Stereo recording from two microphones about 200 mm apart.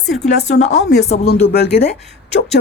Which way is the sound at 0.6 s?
35° left (ahead or behind).